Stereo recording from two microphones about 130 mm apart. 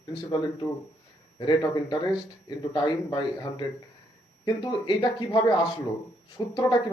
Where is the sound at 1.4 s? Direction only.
35° left (ahead or behind).